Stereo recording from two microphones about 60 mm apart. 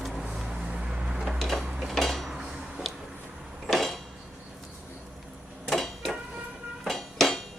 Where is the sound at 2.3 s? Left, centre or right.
Centre.